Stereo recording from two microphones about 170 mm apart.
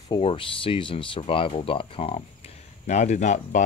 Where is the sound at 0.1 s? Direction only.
30° left (ahead or behind).